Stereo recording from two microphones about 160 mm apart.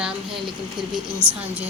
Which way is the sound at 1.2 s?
30° right (ahead or behind).